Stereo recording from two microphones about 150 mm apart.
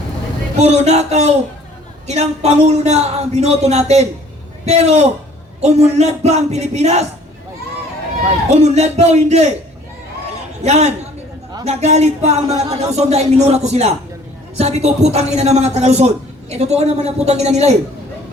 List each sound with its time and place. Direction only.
0.6 s a man's voice: 45° right (ahead or behind)
8.5 s a man's voice: 45° right (ahead or behind)
10.6 s a man's voice: 45° right (ahead or behind)